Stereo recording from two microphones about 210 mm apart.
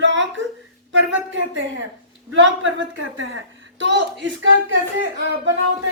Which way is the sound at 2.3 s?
65° right (ahead or behind).